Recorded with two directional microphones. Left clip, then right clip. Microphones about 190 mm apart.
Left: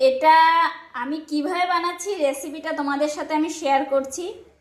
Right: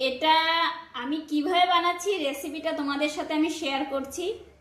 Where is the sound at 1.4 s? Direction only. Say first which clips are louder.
Even; 25° left (ahead or behind).